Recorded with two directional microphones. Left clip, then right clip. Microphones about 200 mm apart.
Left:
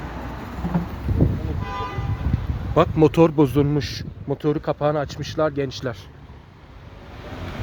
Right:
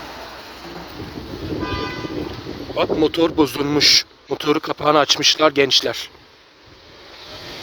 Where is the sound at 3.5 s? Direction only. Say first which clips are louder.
Right 8 dB; 10° right (ahead or behind).